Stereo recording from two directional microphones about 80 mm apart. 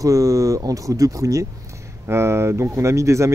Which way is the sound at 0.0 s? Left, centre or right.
Right.